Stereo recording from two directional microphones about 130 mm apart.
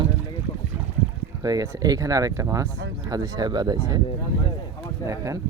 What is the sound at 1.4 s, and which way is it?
Speech, 30° right (ahead or behind).